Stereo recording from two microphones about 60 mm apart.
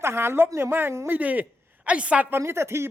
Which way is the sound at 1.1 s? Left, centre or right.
Right.